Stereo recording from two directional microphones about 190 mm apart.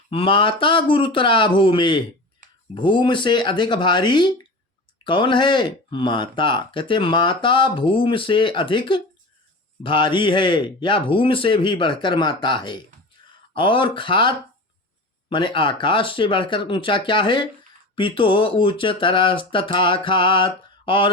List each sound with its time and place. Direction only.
0.1 s speech: 25° left (ahead or behind)